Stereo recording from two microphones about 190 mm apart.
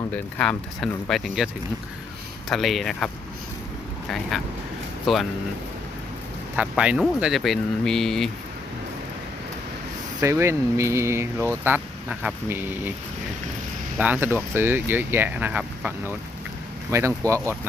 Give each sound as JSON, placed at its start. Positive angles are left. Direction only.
{"t": 0.1, "sound": "speech", "side_deg": 5}
{"t": 2.5, "sound": "speech", "side_deg": 0}
{"t": 4.3, "sound": "speech", "side_deg": 0}
{"t": 6.6, "sound": "speech", "side_deg": -5}
{"t": 10.2, "sound": "speech", "side_deg": -15}
{"t": 14.0, "sound": "speech", "side_deg": -10}